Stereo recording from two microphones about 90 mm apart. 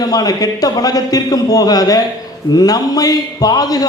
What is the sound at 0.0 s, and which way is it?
A man's voice, 45° left (ahead or behind).